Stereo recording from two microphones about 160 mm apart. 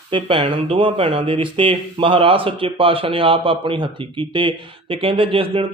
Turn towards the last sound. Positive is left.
turn(degrees=-35)  # may be behind; listen again after turning